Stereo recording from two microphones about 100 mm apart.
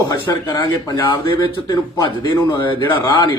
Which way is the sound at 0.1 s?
40° left (ahead or behind).